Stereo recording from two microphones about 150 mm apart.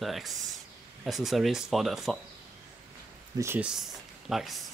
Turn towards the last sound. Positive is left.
turn(degrees=0)  # may be behind; listen again after turning